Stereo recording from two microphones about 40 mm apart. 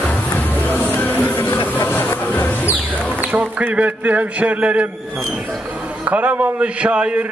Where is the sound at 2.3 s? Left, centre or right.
Left.